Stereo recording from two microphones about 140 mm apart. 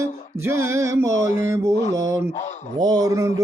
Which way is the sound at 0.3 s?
15° right (ahead or behind).